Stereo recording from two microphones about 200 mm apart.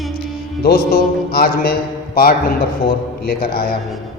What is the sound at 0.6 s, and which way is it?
Speech, 50° left (ahead or behind).